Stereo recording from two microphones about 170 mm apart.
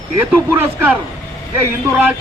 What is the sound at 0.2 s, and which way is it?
A man's voice, 10° right (ahead or behind).